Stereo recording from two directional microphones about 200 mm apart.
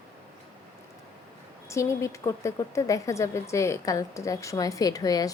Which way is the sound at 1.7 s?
15° left (ahead or behind).